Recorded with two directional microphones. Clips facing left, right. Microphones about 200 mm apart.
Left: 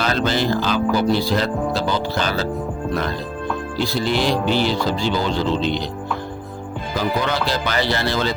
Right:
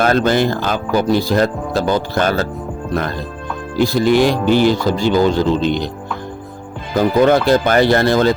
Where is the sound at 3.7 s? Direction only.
50° right (ahead or behind).